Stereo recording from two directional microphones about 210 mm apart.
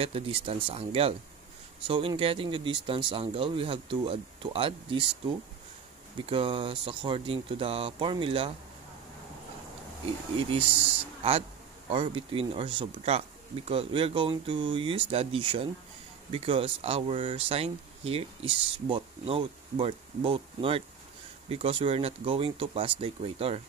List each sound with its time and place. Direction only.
0.0 s speech: 30° right (ahead or behind)
6.2 s speech: 25° right (ahead or behind)
11.9 s speech: 25° right (ahead or behind)